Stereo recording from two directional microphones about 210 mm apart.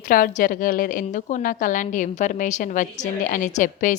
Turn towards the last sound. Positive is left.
turn(degrees=40)  # may be behind; listen again after turning